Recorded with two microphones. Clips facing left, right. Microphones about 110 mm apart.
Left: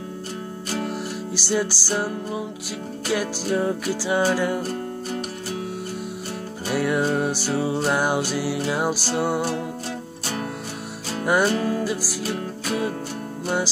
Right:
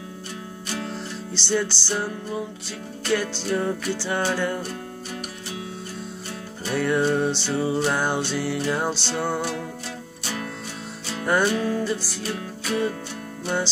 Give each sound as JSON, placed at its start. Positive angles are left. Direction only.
{"t": 1.3, "sound": "music", "side_deg": 10}
{"t": 3.1, "sound": "music", "side_deg": 10}
{"t": 4.6, "sound": "music", "side_deg": 40}
{"t": 6.7, "sound": "music", "side_deg": 10}
{"t": 11.2, "sound": "music", "side_deg": 15}
{"t": 11.5, "sound": "music", "side_deg": 35}
{"t": 11.8, "sound": "music", "side_deg": 10}